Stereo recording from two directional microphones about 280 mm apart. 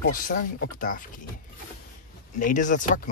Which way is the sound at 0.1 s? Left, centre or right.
Left.